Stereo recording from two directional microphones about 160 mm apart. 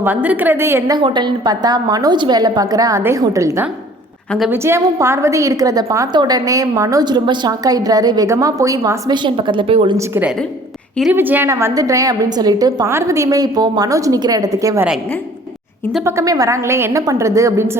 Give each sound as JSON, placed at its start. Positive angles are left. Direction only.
{"t": 0.0, "sound": "a woman's voice", "side_deg": -10}
{"t": 0.9, "sound": "a woman's voice", "side_deg": -30}
{"t": 4.3, "sound": "a woman's voice", "side_deg": 0}
{"t": 4.5, "sound": "a woman's voice", "side_deg": -15}
{"t": 11.1, "sound": "a woman's voice", "side_deg": -10}
{"t": 16.0, "sound": "a woman's voice", "side_deg": -20}